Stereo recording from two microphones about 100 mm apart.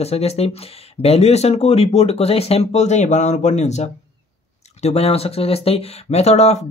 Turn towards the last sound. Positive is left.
turn(degrees=90)